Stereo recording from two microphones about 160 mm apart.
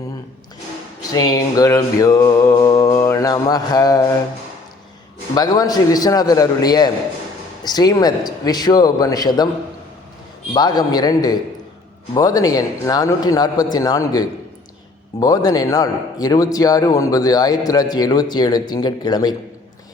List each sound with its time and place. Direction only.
1.1 s a man's voice: 20° left (ahead or behind)
5.3 s a man's voice: 25° left (ahead or behind)
10.5 s a man's voice: 25° left (ahead or behind)